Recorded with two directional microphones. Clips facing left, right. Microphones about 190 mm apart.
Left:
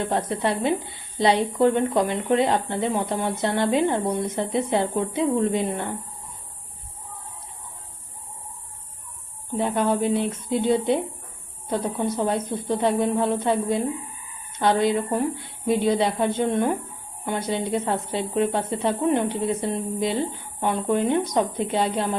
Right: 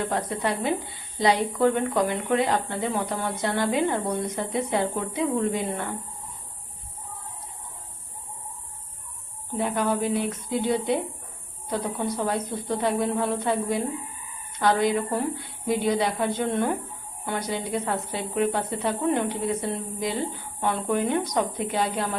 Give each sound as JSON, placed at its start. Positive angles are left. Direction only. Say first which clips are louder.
{"t": 0.1, "sound": "a woman's voice", "louder": "left 3 dB", "side_deg": 25}
{"t": 9.6, "sound": "a woman's voice", "louder": "left 3 dB", "side_deg": 25}